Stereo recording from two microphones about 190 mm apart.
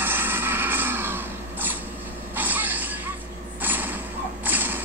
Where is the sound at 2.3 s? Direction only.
10° right (ahead or behind).